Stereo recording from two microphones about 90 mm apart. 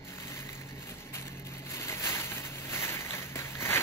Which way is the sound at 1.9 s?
30° left (ahead or behind).